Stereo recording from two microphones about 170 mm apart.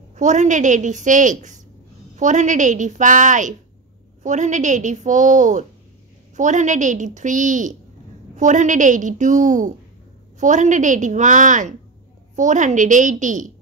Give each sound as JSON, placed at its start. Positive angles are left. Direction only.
{"t": 0.1, "sound": "a woman's voice", "side_deg": -45}